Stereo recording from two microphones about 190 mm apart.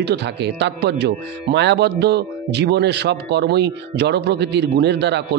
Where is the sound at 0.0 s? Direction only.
65° right (ahead or behind).